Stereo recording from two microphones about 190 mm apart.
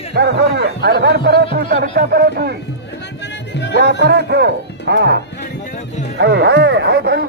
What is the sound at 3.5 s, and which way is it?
Music, 65° left (ahead or behind).